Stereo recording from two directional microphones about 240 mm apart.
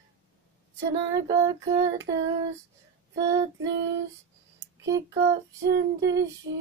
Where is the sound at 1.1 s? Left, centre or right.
Centre.